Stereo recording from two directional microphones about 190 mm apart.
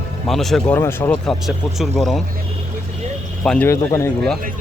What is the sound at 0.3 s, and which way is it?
Speech, centre (ahead or behind).